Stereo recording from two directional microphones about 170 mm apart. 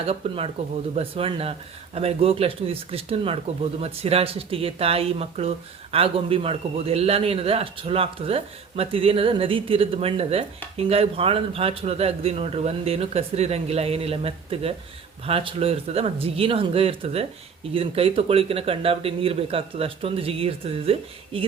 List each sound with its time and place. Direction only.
0.0 s speech: 35° right (ahead or behind)